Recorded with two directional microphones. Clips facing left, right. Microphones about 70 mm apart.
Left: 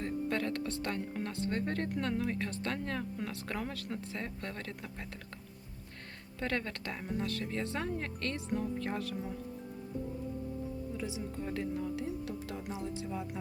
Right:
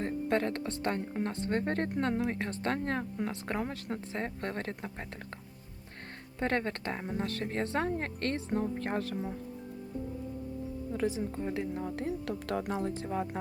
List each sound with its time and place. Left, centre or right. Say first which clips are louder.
0.0 s a woman's voice: right 4 dB; right
6.4 s a woman's voice: right 4 dB; right
10.9 s a woman's voice: right 6 dB; right
12.0 s speech: right 4 dB; right